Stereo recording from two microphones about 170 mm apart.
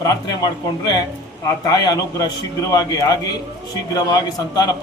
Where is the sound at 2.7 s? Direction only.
20° left (ahead or behind).